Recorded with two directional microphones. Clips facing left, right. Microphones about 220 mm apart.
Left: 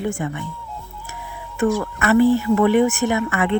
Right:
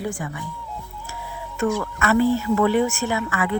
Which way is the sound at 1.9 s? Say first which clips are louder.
Left 4 dB; 15° left (ahead or behind).